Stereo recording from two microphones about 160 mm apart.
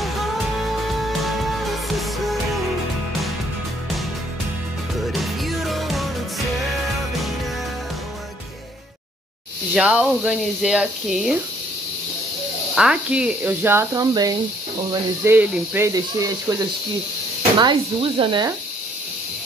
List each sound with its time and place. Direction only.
0.0 s music: centre (ahead or behind)
5.0 s music: centre (ahead or behind)
9.8 s speech: 5° right (ahead or behind)
12.7 s speech: 5° right (ahead or behind); by 16.5 s 20° right (ahead or behind)
17.6 s speech: 30° right (ahead or behind)